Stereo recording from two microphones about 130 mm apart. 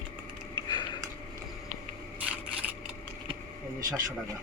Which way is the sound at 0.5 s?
35° left (ahead or behind).